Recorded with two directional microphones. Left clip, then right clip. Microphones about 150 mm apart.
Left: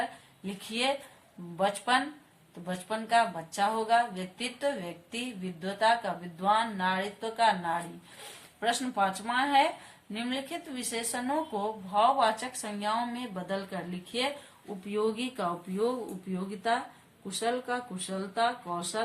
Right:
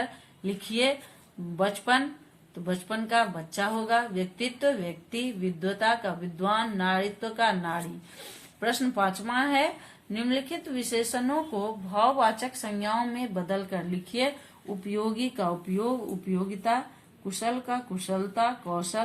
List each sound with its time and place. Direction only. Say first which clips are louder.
0.4 s speech: right 4 dB; 30° right (ahead or behind)